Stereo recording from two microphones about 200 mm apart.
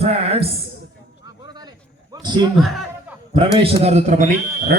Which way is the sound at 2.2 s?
20° right (ahead or behind).